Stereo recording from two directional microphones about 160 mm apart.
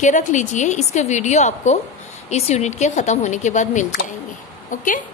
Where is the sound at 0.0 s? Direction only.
50° left (ahead or behind).